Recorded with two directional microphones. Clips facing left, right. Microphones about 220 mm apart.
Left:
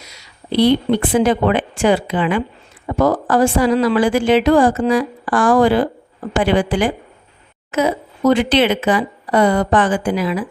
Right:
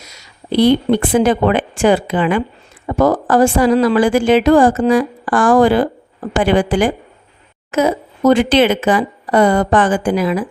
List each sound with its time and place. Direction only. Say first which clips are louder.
0.0 s speech: right 1 dB; 45° right (ahead or behind)